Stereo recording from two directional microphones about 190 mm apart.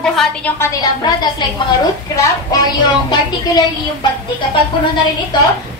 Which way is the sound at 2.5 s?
20° left (ahead or behind).